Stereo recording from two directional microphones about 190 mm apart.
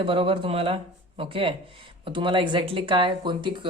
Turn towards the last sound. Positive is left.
turn(degrees=-25)  # may be behind; listen again after turning